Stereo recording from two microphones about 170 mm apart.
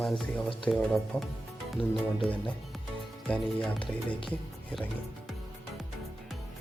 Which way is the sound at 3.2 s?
10° left (ahead or behind).